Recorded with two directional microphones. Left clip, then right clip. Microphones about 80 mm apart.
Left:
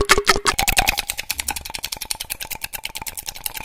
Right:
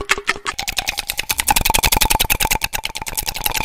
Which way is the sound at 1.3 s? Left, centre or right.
Right.